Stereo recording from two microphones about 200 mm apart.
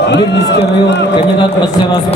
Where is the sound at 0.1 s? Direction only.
60° left (ahead or behind).